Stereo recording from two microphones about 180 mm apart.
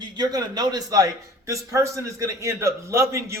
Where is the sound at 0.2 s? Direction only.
20° right (ahead or behind).